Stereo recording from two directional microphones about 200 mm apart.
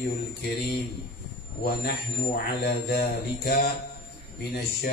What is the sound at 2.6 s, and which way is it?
Speech, 50° left (ahead or behind).